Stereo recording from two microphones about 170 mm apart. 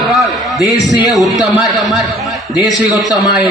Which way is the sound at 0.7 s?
20° left (ahead or behind).